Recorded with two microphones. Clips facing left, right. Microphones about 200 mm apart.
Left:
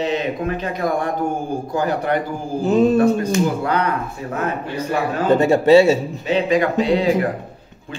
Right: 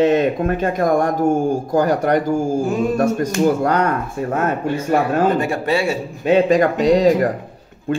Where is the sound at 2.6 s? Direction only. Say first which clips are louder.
Left 4 dB; 20° left (ahead or behind).